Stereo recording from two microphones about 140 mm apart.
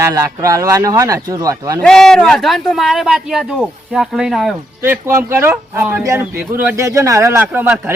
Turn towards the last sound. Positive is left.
turn(degrees=-15)  # may be behind; listen again after turning